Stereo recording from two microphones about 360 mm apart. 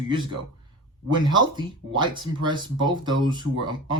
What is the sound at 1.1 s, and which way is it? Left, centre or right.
Speech, centre.